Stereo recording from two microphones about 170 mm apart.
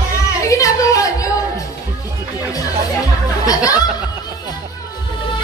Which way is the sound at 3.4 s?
20° left (ahead or behind).